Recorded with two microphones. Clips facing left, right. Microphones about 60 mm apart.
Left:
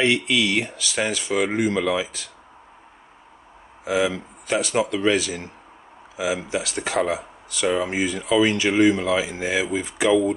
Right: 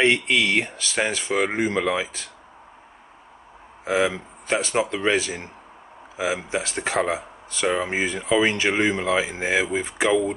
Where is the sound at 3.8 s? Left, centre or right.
Right.